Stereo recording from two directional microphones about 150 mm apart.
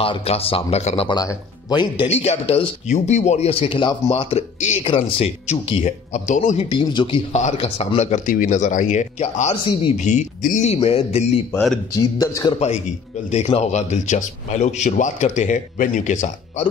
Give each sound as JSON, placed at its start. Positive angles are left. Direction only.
{"t": 0.0, "sound": "speech", "side_deg": 40}
{"t": 1.0, "sound": "a man's voice", "side_deg": 25}
{"t": 2.0, "sound": "speech", "side_deg": 45}
{"t": 6.7, "sound": "speech", "side_deg": 30}
{"t": 7.3, "sound": "speech", "side_deg": 45}
{"t": 8.3, "sound": "speech", "side_deg": 60}
{"t": 12.0, "sound": "a man's voice", "side_deg": 20}
{"t": 12.5, "sound": "speech", "side_deg": 50}